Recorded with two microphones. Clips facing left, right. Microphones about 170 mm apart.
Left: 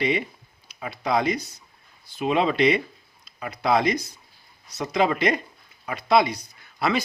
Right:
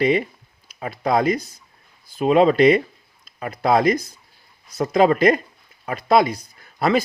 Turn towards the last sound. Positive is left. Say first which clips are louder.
# right 5 dB
turn(degrees=-45)  # may be behind; listen again after turning